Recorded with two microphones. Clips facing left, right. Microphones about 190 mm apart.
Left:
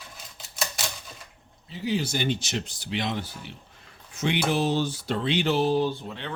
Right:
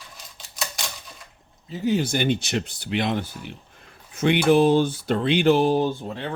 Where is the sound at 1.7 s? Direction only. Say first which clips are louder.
Right 5 dB; 50° right (ahead or behind).